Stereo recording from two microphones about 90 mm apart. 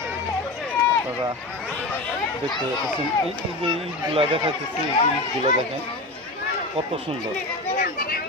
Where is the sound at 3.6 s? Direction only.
90° right.